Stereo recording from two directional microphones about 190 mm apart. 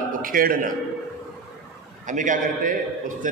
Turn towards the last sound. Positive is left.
turn(degrees=-45)  # may be behind; listen again after turning